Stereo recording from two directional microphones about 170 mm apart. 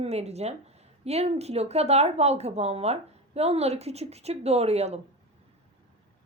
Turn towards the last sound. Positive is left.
turn(degrees=-40)  # may be behind; listen again after turning